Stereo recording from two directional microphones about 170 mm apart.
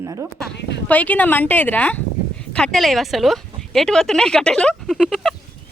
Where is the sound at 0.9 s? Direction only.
10° left (ahead or behind).